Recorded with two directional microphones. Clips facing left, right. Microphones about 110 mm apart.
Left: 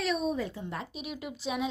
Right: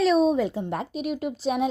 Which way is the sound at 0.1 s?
90° right.